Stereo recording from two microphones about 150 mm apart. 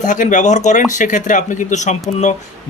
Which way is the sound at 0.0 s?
55° left (ahead or behind).